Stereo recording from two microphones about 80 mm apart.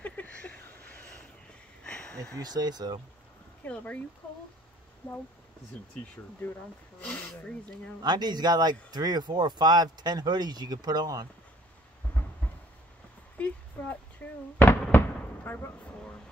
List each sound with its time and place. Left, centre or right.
0.0 s a sound: centre
2.4 s speech: right
3.6 s speech: centre
7.1 s speech: centre
8.0 s speech: right
13.4 s fireworks: centre